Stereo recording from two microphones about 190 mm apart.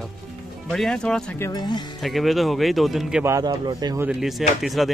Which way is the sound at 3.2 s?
20° right (ahead or behind).